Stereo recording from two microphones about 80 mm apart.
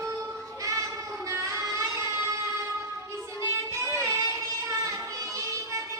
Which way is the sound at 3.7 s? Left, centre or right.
Right.